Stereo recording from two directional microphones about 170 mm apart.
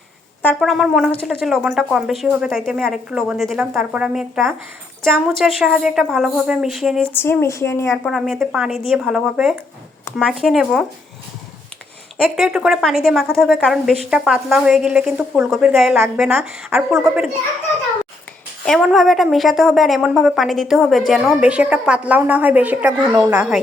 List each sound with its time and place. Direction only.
0.6 s a woman's voice: centre (ahead or behind)
7.1 s speech: 10° left (ahead or behind)
8.0 s a woman's voice: centre (ahead or behind)
12.1 s a woman's voice: centre (ahead or behind)
18.6 s a woman's voice: centre (ahead or behind)